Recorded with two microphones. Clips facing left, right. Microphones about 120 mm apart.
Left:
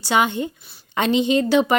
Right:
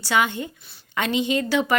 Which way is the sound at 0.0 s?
20° left (ahead or behind).